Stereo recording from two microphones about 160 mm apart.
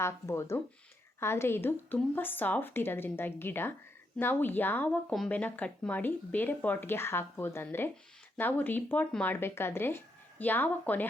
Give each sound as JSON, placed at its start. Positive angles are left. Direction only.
{"t": 0.0, "sound": "speech", "side_deg": 20}